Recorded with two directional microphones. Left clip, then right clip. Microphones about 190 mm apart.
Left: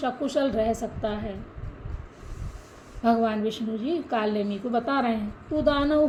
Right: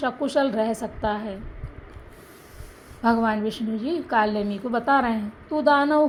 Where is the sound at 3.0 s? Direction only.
25° right (ahead or behind).